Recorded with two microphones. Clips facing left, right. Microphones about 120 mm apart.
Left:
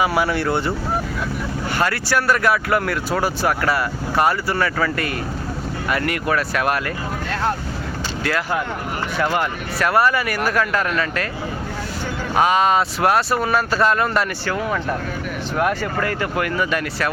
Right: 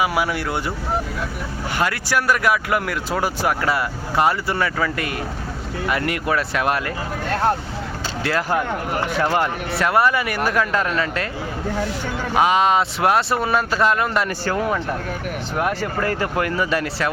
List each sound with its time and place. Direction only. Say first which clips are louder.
0.0 s speech: left 2 dB; 10° right (ahead or behind)
1.8 s speech: left 1 dB; 15° right (ahead or behind)
8.2 s speech: right 2 dB; 30° right (ahead or behind)
12.3 s speech: even; 20° right (ahead or behind)
15.5 s speech: left 2 dB; 20° right (ahead or behind)